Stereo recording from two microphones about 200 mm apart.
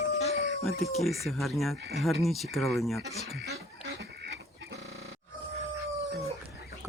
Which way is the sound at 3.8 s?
60° right (ahead or behind).